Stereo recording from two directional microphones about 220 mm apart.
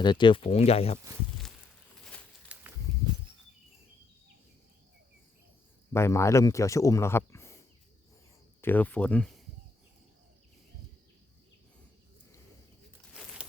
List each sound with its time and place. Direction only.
0.0 s speech: 20° left (ahead or behind)
2.5 s a sound: 5° right (ahead or behind)
5.9 s speech: 10° left (ahead or behind)
8.6 s speech: 10° left (ahead or behind)